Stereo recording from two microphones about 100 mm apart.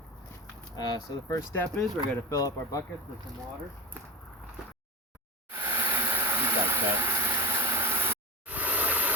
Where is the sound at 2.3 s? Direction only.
40° left (ahead or behind).